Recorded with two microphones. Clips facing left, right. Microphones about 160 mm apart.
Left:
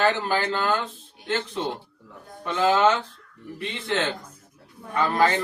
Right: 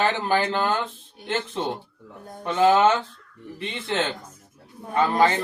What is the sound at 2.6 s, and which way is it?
Speech, 20° right (ahead or behind).